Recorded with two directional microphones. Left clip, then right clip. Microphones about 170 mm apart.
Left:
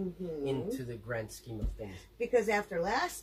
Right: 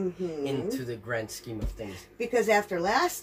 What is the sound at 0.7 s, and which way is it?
Speech, 15° left (ahead or behind).